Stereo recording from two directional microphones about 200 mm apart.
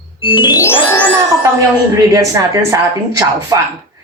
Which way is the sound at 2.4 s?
15° right (ahead or behind).